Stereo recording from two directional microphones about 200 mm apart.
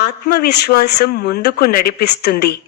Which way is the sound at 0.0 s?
55° left (ahead or behind).